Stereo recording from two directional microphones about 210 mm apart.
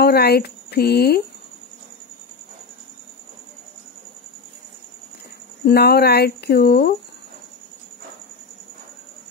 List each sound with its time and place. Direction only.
0.0 s speech: 50° left (ahead or behind)
5.7 s speech: 50° left (ahead or behind)